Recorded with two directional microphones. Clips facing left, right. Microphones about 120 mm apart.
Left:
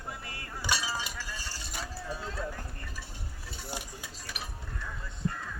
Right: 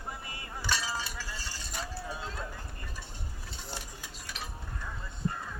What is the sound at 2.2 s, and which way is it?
Clip-clop, 20° right (ahead or behind).